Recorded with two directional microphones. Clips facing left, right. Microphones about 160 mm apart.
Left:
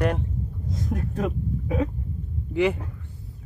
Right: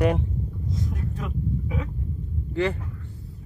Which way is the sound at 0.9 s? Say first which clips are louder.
Left 5 dB; 45° left (ahead or behind).